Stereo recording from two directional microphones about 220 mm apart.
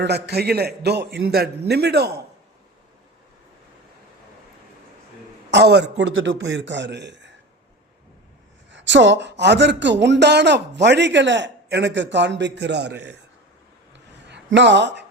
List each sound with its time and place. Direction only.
0.0 s speech: 45° right (ahead or behind)
5.5 s speech: 50° right (ahead or behind)
8.7 s speech: 55° right (ahead or behind)
14.3 s speech: 50° right (ahead or behind)